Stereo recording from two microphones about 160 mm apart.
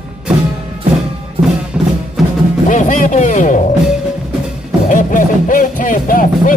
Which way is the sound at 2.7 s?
50° left (ahead or behind).